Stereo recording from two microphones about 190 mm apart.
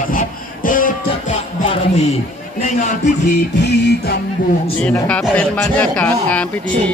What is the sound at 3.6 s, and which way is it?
Music, 60° left (ahead or behind).